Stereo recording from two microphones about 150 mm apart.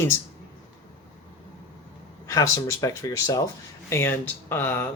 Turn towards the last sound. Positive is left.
turn(degrees=15)  # may be behind; listen again after turning